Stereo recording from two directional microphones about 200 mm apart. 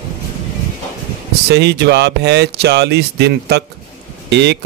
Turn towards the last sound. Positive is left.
turn(degrees=-60)  # may be behind; listen again after turning